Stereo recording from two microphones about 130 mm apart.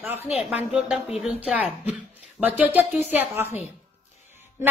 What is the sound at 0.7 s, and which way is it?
Speech, 5° right (ahead or behind).